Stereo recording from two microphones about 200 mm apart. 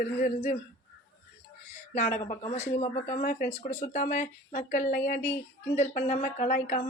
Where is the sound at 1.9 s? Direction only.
35° left (ahead or behind).